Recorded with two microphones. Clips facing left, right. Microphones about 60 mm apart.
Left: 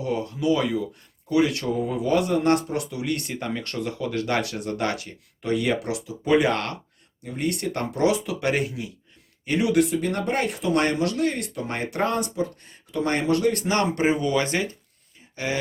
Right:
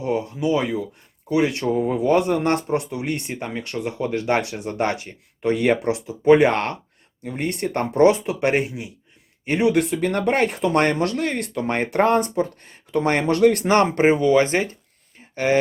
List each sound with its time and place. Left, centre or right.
0.0 s speech: right
1.7 s speech: right
5.0 s speech: right
7.9 s speech: right
13.2 s speech: right
13.6 s speech: right